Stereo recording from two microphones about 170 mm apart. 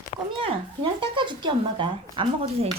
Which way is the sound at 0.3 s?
30° right (ahead or behind).